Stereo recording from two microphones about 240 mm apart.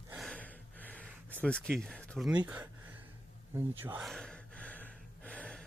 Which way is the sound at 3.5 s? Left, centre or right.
Centre.